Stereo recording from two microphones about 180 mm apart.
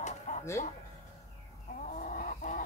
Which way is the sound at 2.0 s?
45° left (ahead or behind).